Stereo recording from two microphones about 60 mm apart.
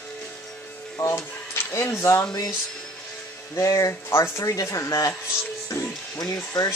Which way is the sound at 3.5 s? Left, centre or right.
Left.